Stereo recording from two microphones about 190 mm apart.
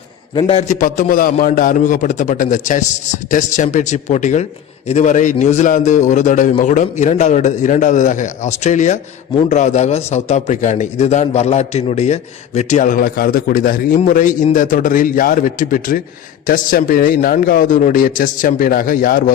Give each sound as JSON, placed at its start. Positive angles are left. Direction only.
{"t": 0.3, "sound": "a man's voice", "side_deg": 30}